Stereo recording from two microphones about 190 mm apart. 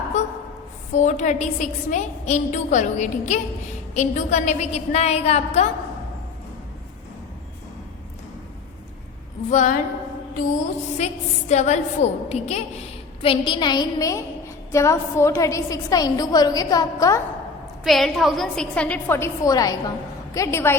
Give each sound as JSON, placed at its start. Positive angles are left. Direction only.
{"t": 0.1, "sound": "a sound", "side_deg": 40}
{"t": 0.9, "sound": "a woman's voice", "side_deg": 40}
{"t": 9.5, "sound": "a woman's voice", "side_deg": 40}
{"t": 10.9, "sound": "a woman's voice", "side_deg": 35}
{"t": 17.8, "sound": "a woman's voice", "side_deg": 0}